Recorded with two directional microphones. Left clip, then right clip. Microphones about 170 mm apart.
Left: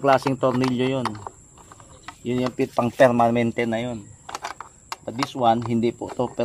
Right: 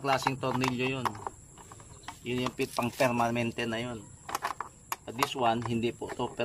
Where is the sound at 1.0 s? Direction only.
5° right (ahead or behind).